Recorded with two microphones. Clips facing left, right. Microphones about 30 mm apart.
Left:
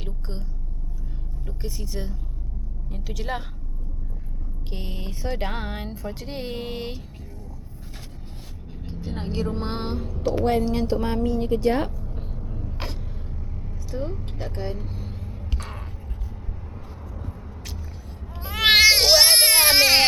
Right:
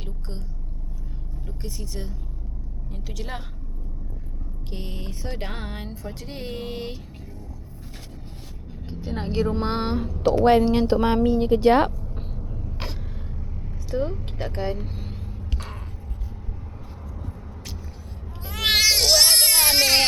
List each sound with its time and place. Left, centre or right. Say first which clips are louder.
0.0 s vehicle: left 1 dB; centre
1.5 s speech: left 2 dB; centre
4.7 s speech: even; centre
8.9 s speech: right 2 dB; centre
10.4 s speech: right 6 dB; right
11.6 s speech: right 6 dB; right
11.9 s a sound: right 1 dB; centre
12.4 s vehicle: left 1 dB; centre
13.9 s speech: right 5 dB; centre
15.3 s a sound: even; centre
17.2 s vehicle: even; centre
18.3 s a sound: left 4 dB; centre